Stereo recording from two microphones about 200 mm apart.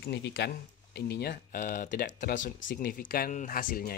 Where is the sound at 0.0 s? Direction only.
55° left (ahead or behind).